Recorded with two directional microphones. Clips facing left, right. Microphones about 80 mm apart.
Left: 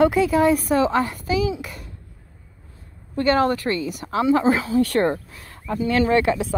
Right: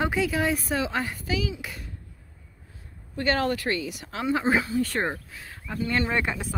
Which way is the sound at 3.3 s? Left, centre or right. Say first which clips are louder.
Left 6 dB; left.